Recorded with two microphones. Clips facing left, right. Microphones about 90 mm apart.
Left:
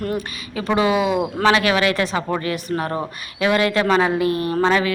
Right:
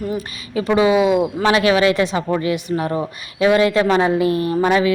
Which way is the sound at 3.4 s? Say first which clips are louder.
Right 4 dB; 25° right (ahead or behind).